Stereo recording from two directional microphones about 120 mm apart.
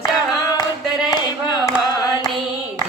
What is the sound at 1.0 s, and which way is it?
Clapping, 35° left (ahead or behind).